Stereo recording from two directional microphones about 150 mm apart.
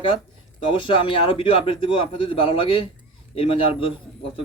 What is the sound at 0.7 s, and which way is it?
A man's voice, 35° left (ahead or behind).